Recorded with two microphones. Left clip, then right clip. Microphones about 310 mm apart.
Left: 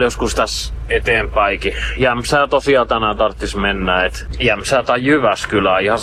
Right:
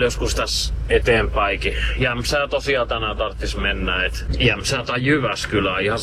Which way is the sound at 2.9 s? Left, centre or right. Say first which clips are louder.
Left 8 dB; left.